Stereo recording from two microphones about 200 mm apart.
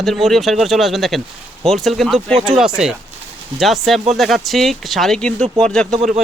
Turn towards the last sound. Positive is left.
turn(degrees=-35)  # may be behind; listen again after turning